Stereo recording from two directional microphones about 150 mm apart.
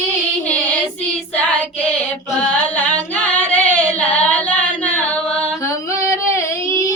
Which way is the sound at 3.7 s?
10° left (ahead or behind).